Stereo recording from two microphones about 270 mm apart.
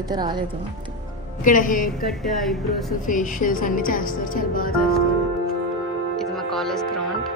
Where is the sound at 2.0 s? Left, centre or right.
Centre.